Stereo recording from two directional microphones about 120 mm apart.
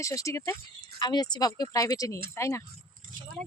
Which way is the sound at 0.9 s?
35° left (ahead or behind).